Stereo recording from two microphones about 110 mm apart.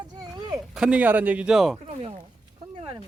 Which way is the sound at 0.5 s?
5° right (ahead or behind).